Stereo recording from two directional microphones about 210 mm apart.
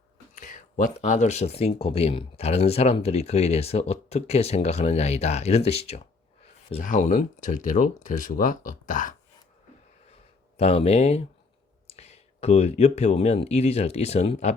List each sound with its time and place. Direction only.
0.3 s speech: 40° left (ahead or behind)
10.6 s speech: 30° left (ahead or behind)